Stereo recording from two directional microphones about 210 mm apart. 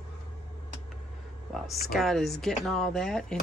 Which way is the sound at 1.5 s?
Centre (ahead or behind).